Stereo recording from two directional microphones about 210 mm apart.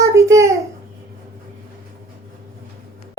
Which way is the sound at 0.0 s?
15° right (ahead or behind).